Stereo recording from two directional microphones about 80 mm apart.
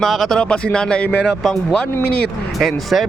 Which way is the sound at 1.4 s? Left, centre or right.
Centre.